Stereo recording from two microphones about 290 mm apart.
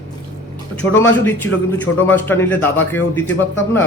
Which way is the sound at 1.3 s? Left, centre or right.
Centre.